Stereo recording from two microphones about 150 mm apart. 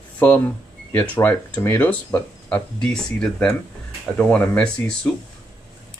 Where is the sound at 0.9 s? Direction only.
15° left (ahead or behind).